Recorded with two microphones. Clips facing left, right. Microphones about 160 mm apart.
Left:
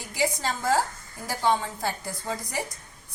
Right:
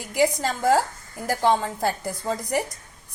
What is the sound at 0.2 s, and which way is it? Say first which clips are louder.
A woman's voice: right 6 dB; 50° right (ahead or behind).